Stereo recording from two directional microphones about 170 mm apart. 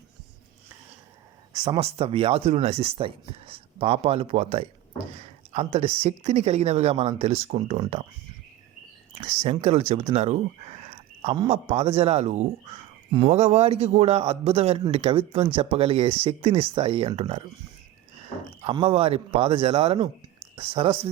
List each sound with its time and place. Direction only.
1.5 s a man's voice: 30° right (ahead or behind)
9.1 s a man's voice: 40° right (ahead or behind)
18.6 s a man's voice: 30° right (ahead or behind)